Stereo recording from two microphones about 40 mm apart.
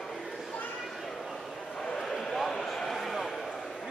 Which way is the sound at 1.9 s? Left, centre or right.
Centre.